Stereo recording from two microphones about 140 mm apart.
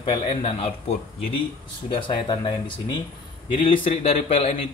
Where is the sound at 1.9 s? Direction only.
35° left (ahead or behind).